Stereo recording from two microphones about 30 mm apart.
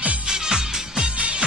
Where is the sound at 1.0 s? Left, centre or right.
Right.